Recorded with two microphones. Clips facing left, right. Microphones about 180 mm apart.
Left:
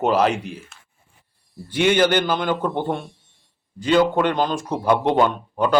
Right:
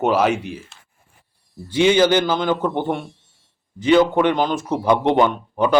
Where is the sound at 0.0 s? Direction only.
5° right (ahead or behind).